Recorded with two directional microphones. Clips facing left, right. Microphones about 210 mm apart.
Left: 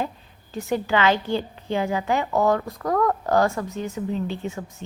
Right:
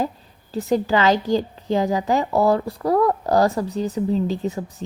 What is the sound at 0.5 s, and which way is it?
A woman's voice, 35° right (ahead or behind).